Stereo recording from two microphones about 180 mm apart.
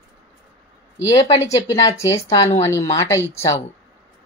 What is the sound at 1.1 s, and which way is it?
Speech, 20° left (ahead or behind).